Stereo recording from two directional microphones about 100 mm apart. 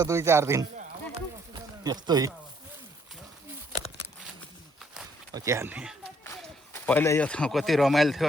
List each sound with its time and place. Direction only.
0.0 s speech: 25° right (ahead or behind)
1.5 s a sound: 45° right (ahead or behind)
5.3 s speech: 30° right (ahead or behind)
5.6 s speech: 10° right (ahead or behind)
6.2 s run: 25° left (ahead or behind)
7.2 s speech: 10° left (ahead or behind)
7.5 s speech: centre (ahead or behind)